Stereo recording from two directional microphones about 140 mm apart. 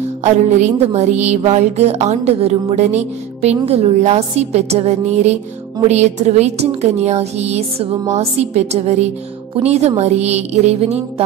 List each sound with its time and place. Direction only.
0.7 s a woman's voice: 55° right (ahead or behind)